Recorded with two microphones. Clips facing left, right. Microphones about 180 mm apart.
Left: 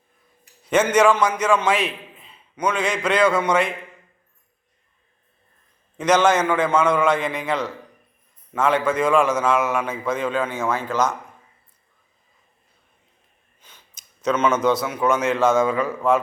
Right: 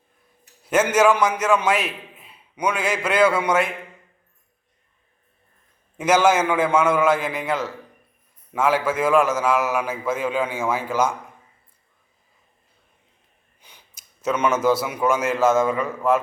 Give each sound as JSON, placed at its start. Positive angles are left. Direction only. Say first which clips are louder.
{"t": 0.6, "sound": "a man's voice", "louder": "left 1 dB", "side_deg": -5}
{"t": 6.0, "sound": "a man's voice", "louder": "even", "side_deg": -5}
{"t": 13.6, "sound": "speech", "louder": "even", "side_deg": -15}